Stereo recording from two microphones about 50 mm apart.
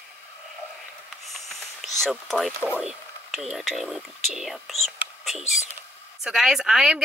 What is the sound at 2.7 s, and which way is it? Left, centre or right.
Speech, right.